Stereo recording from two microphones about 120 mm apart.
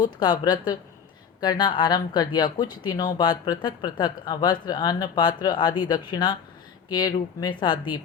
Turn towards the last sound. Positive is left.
turn(degrees=40)  # may be behind; listen again after turning